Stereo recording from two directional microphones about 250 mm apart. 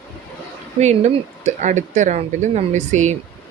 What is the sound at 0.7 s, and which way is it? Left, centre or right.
Speech, right.